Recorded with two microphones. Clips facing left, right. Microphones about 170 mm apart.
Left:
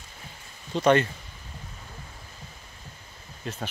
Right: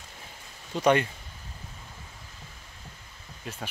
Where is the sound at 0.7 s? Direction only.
10° right (ahead or behind).